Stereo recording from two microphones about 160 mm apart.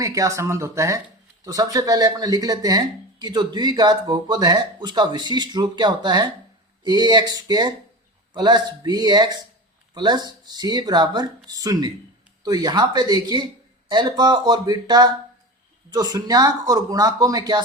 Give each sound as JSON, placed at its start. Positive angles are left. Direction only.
{"t": 0.0, "sound": "speech", "side_deg": -20}